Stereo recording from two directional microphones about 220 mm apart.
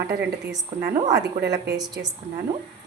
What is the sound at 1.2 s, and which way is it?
Speech, 50° right (ahead or behind).